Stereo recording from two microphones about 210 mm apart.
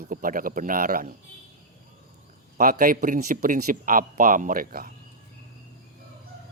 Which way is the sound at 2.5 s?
40° right (ahead or behind).